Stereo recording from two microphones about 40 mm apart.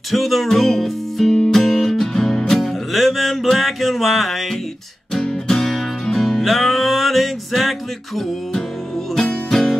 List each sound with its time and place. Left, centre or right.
0.1 s music: centre
5.1 s music: centre
9.5 s music: centre